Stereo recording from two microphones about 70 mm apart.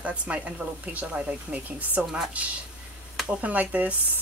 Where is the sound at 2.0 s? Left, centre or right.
Centre.